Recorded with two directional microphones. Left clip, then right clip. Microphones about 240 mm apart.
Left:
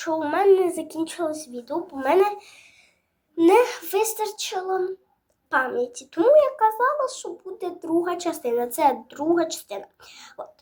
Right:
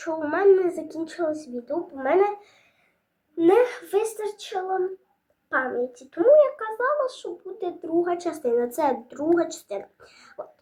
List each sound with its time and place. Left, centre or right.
0.0 s a woman's voice: centre
1.7 s speech: left
3.3 s speech: left
8.3 s a woman's voice: centre
9.8 s speech: left